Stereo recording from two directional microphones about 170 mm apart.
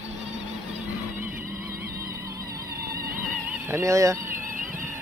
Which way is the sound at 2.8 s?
60° right (ahead or behind).